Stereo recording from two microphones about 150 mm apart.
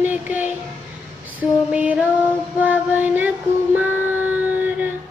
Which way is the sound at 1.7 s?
10° right (ahead or behind).